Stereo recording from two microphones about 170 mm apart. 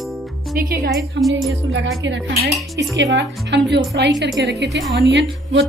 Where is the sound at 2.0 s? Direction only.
90° right.